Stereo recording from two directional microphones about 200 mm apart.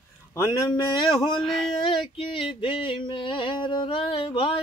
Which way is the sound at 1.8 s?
25° left (ahead or behind).